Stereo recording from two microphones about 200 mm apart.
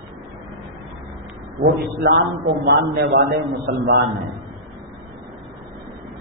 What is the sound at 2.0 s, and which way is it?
A man's voice, 60° right (ahead or behind).